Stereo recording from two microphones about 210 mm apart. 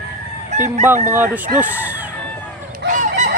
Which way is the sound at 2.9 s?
35° right (ahead or behind).